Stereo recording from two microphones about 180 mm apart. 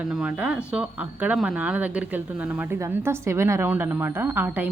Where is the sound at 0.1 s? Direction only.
5° right (ahead or behind).